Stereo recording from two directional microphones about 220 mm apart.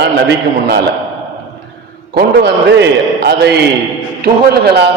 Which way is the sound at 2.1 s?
50° right (ahead or behind).